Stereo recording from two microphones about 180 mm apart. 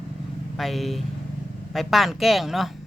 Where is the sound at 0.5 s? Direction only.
Centre (ahead or behind).